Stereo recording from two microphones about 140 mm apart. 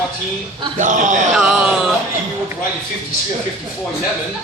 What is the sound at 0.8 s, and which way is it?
Speech, 65° right (ahead or behind).